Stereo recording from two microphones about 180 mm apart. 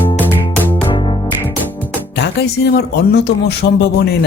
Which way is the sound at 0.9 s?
25° left (ahead or behind).